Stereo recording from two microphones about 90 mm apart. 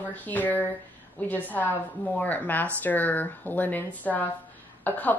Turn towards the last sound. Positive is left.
turn(degrees=20)  # may be behind; listen again after turning